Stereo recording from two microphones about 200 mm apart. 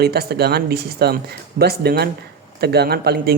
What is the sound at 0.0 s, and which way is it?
Speech, 50° right (ahead or behind).